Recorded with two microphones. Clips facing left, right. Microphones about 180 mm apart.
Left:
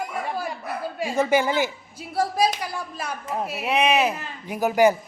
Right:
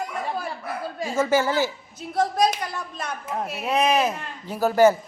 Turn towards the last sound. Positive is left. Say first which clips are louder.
# right 1 dB
turn(degrees=15)  # may be behind; listen again after turning